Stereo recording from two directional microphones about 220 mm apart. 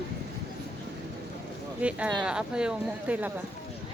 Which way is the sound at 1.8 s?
5° right (ahead or behind).